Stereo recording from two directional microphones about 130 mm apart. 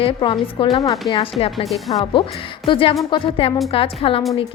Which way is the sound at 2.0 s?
40° left (ahead or behind).